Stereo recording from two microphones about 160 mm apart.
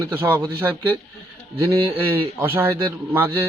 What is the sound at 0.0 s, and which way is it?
A man's voice, 15° right (ahead or behind).